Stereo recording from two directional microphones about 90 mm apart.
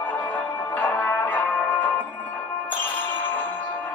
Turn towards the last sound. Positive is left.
turn(degrees=20)  # may be behind; listen again after turning